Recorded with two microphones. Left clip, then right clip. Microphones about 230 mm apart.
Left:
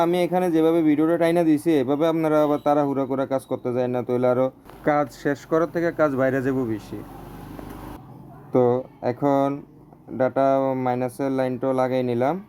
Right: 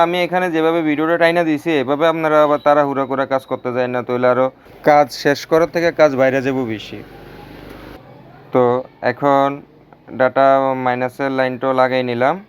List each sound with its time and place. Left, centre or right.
0.0 s speech: centre
4.8 s speech: right
8.5 s speech: centre